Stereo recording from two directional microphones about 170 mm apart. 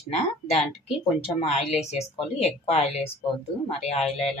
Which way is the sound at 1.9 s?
35° left (ahead or behind).